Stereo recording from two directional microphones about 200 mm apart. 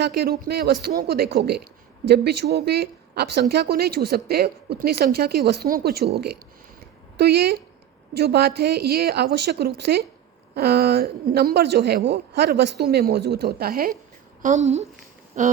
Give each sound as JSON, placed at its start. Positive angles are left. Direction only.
{"t": 0.0, "sound": "a woman's voice", "side_deg": -50}
{"t": 14.4, "sound": "a woman's voice", "side_deg": -35}